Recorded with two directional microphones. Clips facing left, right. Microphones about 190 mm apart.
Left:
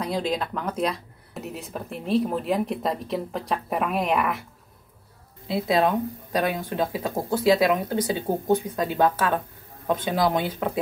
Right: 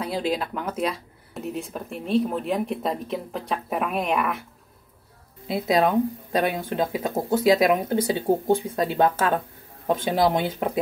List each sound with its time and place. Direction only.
0.0 s speech: 5° right (ahead or behind)
6.3 s speech: 20° right (ahead or behind)